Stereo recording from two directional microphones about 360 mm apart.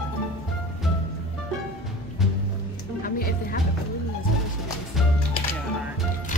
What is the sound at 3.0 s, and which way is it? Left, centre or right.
Music, left.